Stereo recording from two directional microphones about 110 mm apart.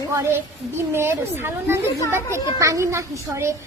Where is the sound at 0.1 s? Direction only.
25° right (ahead or behind).